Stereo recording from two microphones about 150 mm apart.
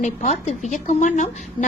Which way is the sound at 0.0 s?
50° left (ahead or behind).